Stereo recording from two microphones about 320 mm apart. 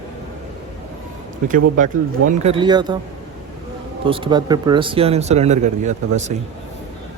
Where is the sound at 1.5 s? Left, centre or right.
Right.